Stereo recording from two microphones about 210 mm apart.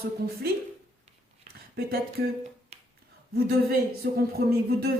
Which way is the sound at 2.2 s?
50° right (ahead or behind).